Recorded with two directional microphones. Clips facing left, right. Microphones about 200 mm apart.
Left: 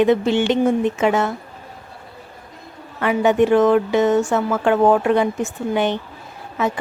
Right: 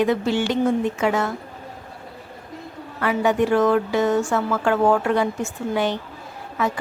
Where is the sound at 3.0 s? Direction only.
20° left (ahead or behind).